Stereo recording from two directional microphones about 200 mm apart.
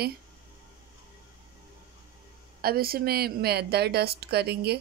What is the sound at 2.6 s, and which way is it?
A woman's voice, 50° right (ahead or behind).